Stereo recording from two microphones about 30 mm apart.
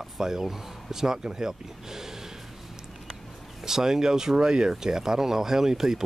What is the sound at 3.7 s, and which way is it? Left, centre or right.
Speech, centre.